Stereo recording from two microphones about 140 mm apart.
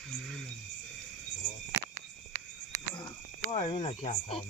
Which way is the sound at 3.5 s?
35° left (ahead or behind).